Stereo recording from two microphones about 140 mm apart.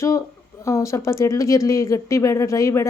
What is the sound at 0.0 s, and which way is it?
Speech, 20° left (ahead or behind).